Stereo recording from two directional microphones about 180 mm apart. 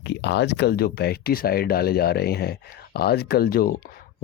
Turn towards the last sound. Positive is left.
turn(degrees=55)  # may be behind; listen again after turning